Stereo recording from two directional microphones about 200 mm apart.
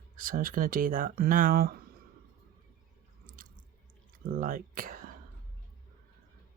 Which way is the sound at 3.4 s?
45° right (ahead or behind).